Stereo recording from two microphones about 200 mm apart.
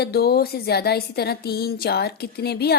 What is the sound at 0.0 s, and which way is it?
A woman's voice, 50° left (ahead or behind).